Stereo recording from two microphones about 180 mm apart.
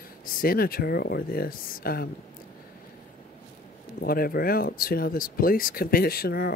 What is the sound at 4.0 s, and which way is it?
Speech, 55° left (ahead or behind).